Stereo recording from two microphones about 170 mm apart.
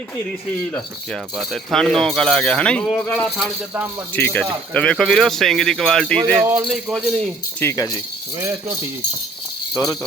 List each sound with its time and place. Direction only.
1.4 s speech: 5° left (ahead or behind)
6.4 s speech: 10° right (ahead or behind)
6.7 s speech: 5° left (ahead or behind)
7.6 s speech: 15° left (ahead or behind)
8.4 s speech: 15° right (ahead or behind)
9.7 s speech: 20° left (ahead or behind)